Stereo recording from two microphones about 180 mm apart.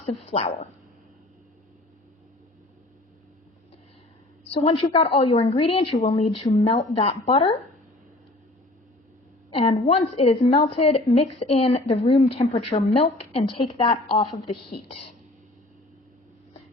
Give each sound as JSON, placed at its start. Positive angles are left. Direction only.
{"t": 0.3, "sound": "speech", "side_deg": 45}
{"t": 4.5, "sound": "a woman's voice", "side_deg": 30}
{"t": 9.5, "sound": "a woman's voice", "side_deg": 30}